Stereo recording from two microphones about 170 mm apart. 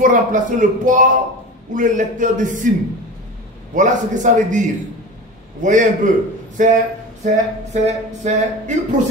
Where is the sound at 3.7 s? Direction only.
45° right (ahead or behind).